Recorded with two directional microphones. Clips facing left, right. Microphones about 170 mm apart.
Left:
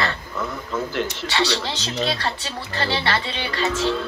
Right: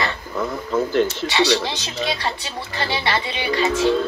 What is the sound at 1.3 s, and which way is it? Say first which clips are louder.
Speech: right 4 dB; 15° right (ahead or behind).